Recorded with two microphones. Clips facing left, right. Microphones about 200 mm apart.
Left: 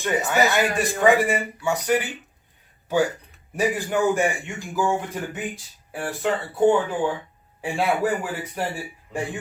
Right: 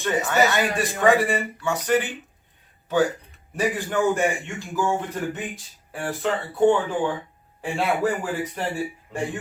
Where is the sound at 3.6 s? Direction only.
10° left (ahead or behind).